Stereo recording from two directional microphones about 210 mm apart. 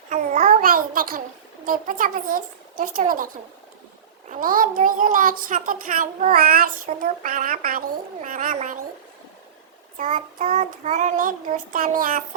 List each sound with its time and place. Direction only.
0.1 s babbling: 40° right (ahead or behind)
1.6 s a child's voice: 40° right (ahead or behind)
4.3 s a child's voice: 40° right (ahead or behind)
10.0 s a child's voice: 35° right (ahead or behind)